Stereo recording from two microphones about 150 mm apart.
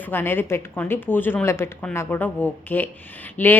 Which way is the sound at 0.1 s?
15° left (ahead or behind).